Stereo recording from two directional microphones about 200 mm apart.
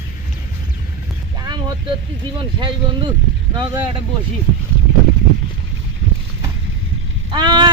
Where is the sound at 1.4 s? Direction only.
20° right (ahead or behind).